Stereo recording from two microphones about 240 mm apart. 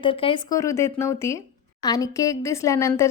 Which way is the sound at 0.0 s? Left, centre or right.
Left.